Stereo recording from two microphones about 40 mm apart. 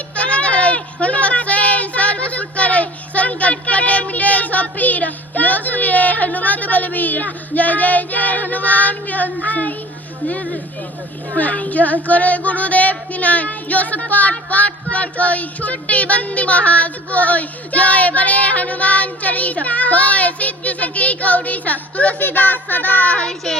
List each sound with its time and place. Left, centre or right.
0.2 s a sound: left
11.3 s female singing: left
22.2 s speech: left